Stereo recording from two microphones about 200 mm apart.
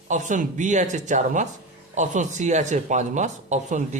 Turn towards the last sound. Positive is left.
turn(degrees=-35)  # may be behind; listen again after turning